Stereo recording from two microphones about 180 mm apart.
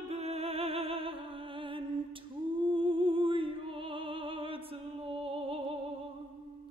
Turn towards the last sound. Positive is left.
turn(degrees=-30)  # may be behind; listen again after turning